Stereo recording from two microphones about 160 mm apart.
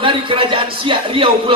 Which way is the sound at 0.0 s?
35° right (ahead or behind).